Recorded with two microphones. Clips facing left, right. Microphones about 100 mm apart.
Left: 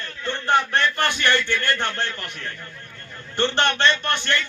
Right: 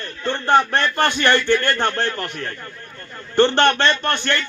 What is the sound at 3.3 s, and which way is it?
Speech, 35° right (ahead or behind).